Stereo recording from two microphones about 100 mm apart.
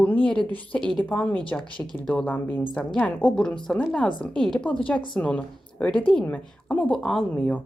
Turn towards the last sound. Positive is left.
turn(degrees=15)  # may be behind; listen again after turning